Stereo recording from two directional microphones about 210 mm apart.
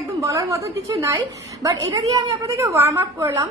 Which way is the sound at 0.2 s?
15° right (ahead or behind).